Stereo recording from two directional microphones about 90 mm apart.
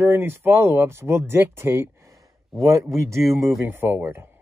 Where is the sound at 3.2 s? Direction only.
Centre (ahead or behind).